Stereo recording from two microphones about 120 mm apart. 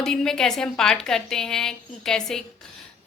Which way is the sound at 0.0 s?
5° left (ahead or behind).